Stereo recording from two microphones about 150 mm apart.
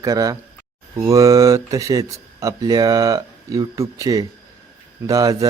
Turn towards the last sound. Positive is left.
turn(degrees=-25)  # may be behind; listen again after turning